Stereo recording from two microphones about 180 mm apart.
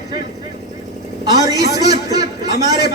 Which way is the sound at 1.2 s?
20° right (ahead or behind).